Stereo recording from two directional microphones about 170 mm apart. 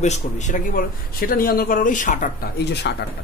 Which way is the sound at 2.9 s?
75° left (ahead or behind).